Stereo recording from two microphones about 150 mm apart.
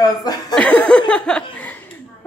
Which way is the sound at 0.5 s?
10° left (ahead or behind).